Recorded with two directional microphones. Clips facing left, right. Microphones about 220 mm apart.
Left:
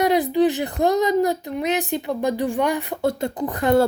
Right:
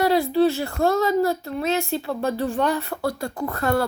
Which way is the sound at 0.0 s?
20° left (ahead or behind).